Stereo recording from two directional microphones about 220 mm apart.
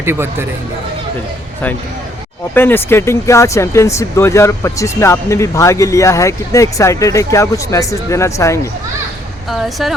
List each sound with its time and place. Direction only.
0.0 s speech: 10° right (ahead or behind)
2.6 s speech: 10° left (ahead or behind)
9.5 s speech: centre (ahead or behind)